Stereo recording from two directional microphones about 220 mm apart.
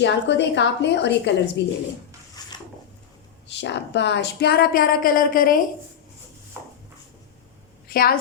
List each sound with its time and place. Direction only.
0.0 s a woman's voice: 50° left (ahead or behind)
2.5 s a sound: 20° left (ahead or behind)
3.5 s a woman's voice: 50° left (ahead or behind)
7.9 s a woman's voice: 40° left (ahead or behind)